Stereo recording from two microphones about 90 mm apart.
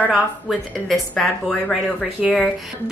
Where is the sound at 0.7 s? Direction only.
Centre (ahead or behind).